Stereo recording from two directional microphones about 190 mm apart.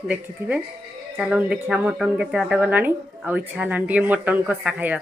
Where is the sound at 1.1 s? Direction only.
5° right (ahead or behind).